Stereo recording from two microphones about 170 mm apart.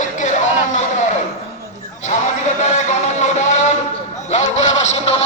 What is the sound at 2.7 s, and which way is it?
Music, 45° left (ahead or behind).